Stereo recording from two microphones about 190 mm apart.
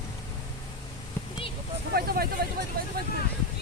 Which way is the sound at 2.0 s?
55° right (ahead or behind).